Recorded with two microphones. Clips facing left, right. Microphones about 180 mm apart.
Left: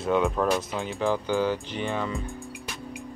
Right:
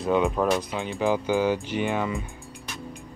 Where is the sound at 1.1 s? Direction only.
15° right (ahead or behind).